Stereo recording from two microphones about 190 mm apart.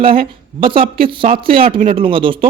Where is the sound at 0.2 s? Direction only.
25° right (ahead or behind).